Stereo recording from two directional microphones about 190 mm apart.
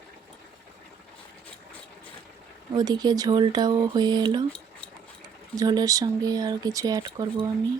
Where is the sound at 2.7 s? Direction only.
20° right (ahead or behind).